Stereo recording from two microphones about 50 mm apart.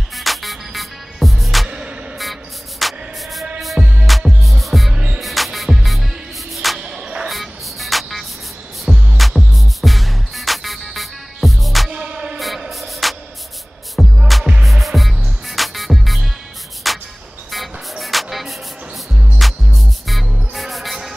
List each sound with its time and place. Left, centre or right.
0.1 s music: centre
1.7 s music: right
2.8 s music: centre
3.8 s music: centre
4.4 s music: centre
4.9 s music: right
5.2 s music: centre
6.8 s music: centre
7.2 s music: centre
11.9 s music: centre
12.4 s music: centre
16.8 s a sound: centre
17.5 s music: centre